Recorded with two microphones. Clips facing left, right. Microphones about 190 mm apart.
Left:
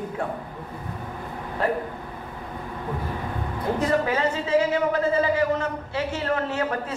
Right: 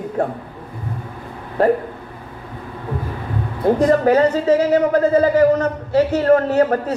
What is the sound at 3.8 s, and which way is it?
A man's voice, 40° right (ahead or behind).